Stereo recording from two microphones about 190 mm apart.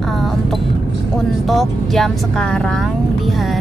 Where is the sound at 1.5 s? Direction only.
Centre (ahead or behind).